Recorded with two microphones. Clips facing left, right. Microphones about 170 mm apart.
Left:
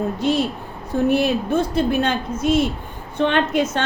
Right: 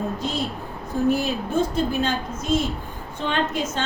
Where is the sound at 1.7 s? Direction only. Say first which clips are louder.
Left 4 dB; 65° left (ahead or behind).